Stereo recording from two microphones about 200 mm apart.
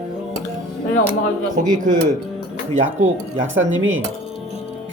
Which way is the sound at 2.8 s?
70° right (ahead or behind).